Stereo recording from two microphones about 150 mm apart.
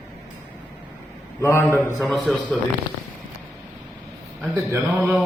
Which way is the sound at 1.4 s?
15° left (ahead or behind).